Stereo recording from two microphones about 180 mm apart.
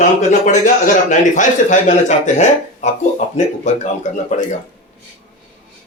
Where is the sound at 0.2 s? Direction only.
40° left (ahead or behind).